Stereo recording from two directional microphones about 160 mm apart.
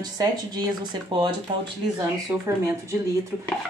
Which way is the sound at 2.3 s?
15° right (ahead or behind).